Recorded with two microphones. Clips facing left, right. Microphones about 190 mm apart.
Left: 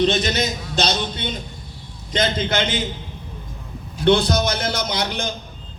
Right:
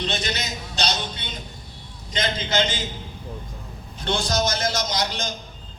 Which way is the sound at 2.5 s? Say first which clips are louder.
Left 2 dB; 60° left (ahead or behind).